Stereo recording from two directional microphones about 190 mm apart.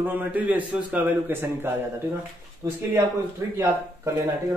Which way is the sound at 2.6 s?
15° right (ahead or behind).